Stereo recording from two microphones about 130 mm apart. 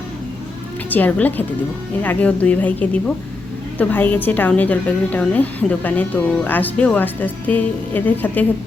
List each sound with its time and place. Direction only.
0.9 s a woman's voice: 10° left (ahead or behind)